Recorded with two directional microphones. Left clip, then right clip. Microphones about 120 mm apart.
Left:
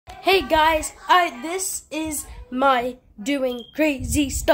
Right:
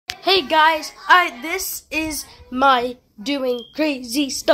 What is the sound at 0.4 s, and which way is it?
Speech, 10° left (ahead or behind).